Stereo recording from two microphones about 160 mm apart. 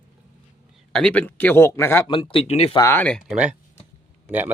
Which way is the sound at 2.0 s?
30° left (ahead or behind).